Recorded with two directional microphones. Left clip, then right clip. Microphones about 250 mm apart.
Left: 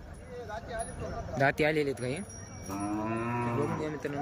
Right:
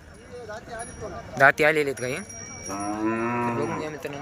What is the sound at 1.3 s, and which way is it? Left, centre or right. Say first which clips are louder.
Speech: right 9 dB; centre.